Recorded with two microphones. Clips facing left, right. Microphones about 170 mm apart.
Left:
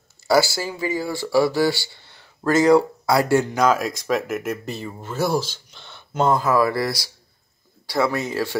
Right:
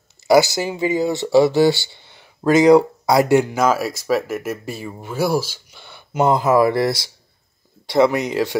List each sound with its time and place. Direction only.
0.3 s speech: 20° right (ahead or behind)
3.5 s speech: 5° right (ahead or behind)